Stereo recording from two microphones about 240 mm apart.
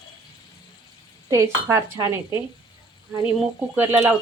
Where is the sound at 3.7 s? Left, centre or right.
Centre.